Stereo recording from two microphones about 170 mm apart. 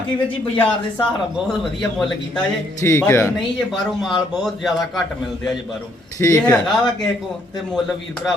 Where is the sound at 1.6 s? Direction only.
Centre (ahead or behind).